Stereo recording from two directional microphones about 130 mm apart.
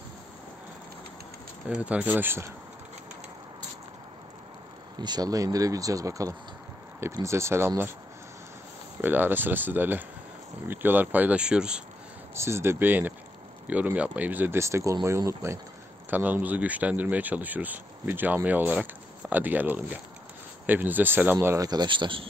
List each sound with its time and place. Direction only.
1.7 s speech: 10° right (ahead or behind)
4.9 s speech: 35° right (ahead or behind)
9.0 s speech: 15° right (ahead or behind)
12.4 s speech: 20° right (ahead or behind)
21.6 s speech: 35° right (ahead or behind)